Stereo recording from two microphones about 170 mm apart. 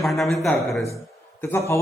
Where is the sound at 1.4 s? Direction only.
15° left (ahead or behind).